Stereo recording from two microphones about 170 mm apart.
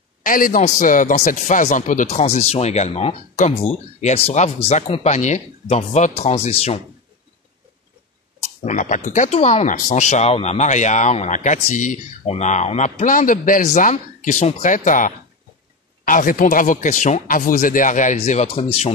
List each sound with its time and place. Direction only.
0.2 s a man's voice: 55° left (ahead or behind); by 6.8 s 35° left (ahead or behind)
8.6 s speech: 45° left (ahead or behind)